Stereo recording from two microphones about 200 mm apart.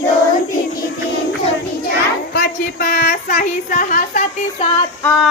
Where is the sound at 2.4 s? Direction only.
45° left (ahead or behind).